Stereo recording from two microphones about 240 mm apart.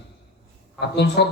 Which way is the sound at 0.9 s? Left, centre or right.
Left.